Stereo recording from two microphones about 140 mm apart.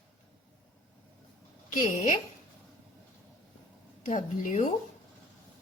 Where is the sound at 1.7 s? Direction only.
65° left (ahead or behind).